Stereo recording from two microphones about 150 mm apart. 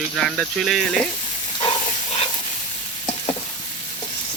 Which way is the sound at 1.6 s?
30° left (ahead or behind).